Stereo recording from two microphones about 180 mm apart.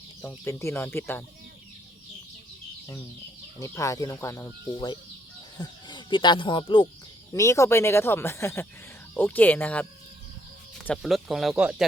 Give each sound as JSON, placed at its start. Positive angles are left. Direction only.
{"t": 0.2, "sound": "speech", "side_deg": 15}
{"t": 3.6, "sound": "speech", "side_deg": 15}
{"t": 5.5, "sound": "speech", "side_deg": 25}
{"t": 7.3, "sound": "speech", "side_deg": 15}
{"t": 10.8, "sound": "speech", "side_deg": 0}